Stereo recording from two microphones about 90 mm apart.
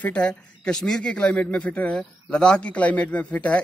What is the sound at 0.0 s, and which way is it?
Speech, 15° left (ahead or behind).